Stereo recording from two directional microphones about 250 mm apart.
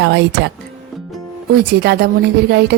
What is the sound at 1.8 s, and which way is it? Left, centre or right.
Speech, right.